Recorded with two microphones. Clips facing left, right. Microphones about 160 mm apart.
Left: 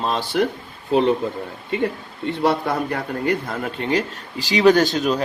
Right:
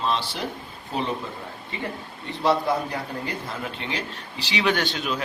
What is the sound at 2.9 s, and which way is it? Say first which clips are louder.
Speech: left 8 dB; 65° left (ahead or behind).